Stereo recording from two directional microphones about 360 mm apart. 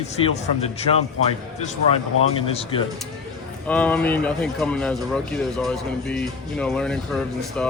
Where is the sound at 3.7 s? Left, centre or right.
Centre.